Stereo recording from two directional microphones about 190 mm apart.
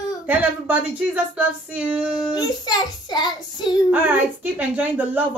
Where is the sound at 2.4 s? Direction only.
20° left (ahead or behind).